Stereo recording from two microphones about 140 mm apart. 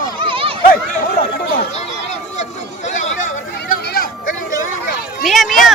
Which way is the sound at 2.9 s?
60° left (ahead or behind).